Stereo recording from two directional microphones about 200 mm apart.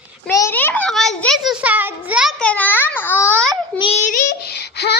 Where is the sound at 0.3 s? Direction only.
15° left (ahead or behind).